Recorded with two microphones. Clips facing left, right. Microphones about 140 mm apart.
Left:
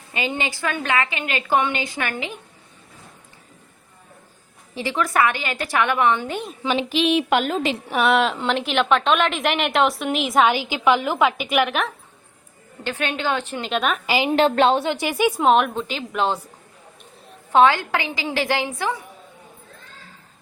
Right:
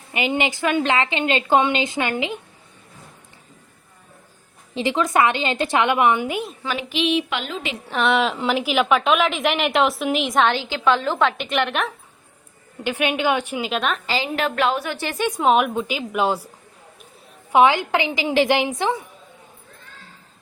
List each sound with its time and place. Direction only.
0.1 s a woman's voice: 15° right (ahead or behind)
4.7 s a woman's voice: 20° right (ahead or behind)
6.6 s a woman's voice: 20° left (ahead or behind)
6.9 s a woman's voice: 45° left (ahead or behind)
7.9 s a woman's voice: 5° left (ahead or behind)
12.8 s a woman's voice: 15° right (ahead or behind)
14.3 s a woman's voice: 30° left (ahead or behind)
14.9 s a woman's voice: 10° left (ahead or behind); by 16.5 s 10° right (ahead or behind)
17.5 s a woman's voice: 15° right (ahead or behind)